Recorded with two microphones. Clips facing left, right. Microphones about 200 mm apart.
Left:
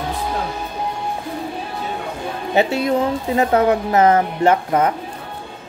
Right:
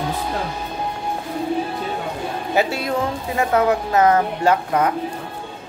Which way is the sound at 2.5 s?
25° left (ahead or behind).